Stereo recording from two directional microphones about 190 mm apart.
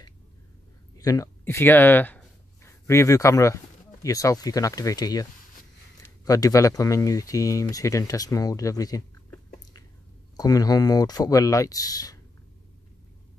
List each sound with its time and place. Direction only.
0.9 s speech: 20° left (ahead or behind)